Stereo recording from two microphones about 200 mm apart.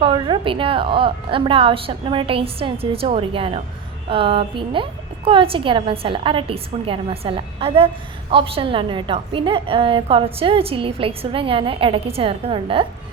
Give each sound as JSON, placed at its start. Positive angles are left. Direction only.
{"t": 0.0, "sound": "a woman's voice", "side_deg": -25}